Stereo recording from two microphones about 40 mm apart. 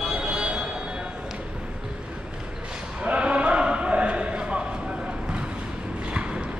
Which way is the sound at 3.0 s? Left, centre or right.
Right.